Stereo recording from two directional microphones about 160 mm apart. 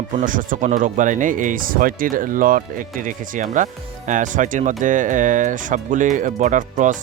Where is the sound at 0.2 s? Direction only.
55° right (ahead or behind).